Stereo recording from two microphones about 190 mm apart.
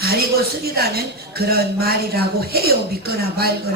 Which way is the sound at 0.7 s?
55° right (ahead or behind).